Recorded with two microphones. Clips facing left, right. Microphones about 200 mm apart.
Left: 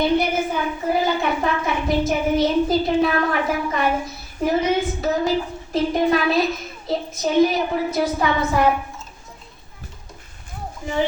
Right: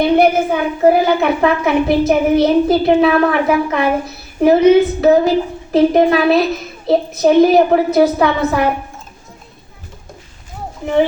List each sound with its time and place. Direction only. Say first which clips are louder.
0.0 s a woman's voice: right 7 dB; 65° right (ahead or behind)